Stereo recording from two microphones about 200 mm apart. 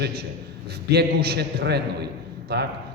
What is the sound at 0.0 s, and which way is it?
A man's voice, 50° right (ahead or behind).